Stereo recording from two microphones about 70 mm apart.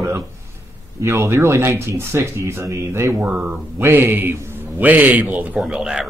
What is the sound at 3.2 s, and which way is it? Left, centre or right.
Speech, centre.